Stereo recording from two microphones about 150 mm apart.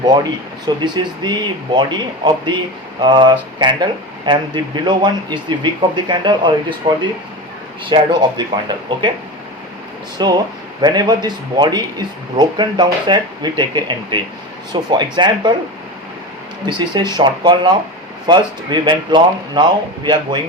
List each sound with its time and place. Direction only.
0.8 s speech: 30° right (ahead or behind)
10.2 s speech: 30° right (ahead or behind)
16.6 s speech: 30° right (ahead or behind)